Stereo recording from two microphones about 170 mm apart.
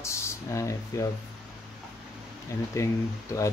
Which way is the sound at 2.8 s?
20° left (ahead or behind).